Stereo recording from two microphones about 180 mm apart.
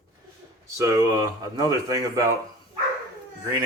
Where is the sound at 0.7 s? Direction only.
15° right (ahead or behind).